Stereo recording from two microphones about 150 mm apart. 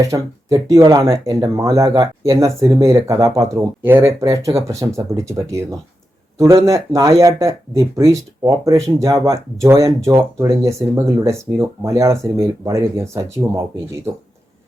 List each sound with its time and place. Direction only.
0.0 s speech: 20° right (ahead or behind)